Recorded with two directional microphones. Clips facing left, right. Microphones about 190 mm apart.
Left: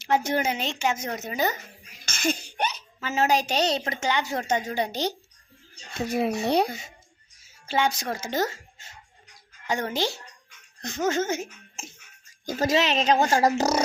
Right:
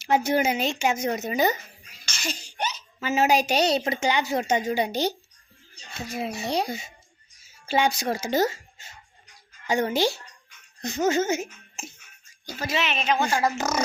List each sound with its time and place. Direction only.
0.0 s a woman's voice: 5° right (ahead or behind)
2.0 s cough: 55° left (ahead or behind)
3.0 s a woman's voice: 10° right (ahead or behind)
6.1 s speech: 55° left (ahead or behind)
7.7 s a woman's voice: 10° right (ahead or behind)
12.5 s speech: 45° left (ahead or behind)